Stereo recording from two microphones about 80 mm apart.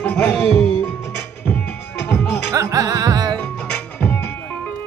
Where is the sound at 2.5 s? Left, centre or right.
Right.